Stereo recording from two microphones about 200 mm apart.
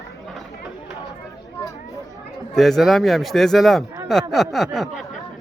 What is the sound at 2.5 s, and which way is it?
Speech, centre (ahead or behind).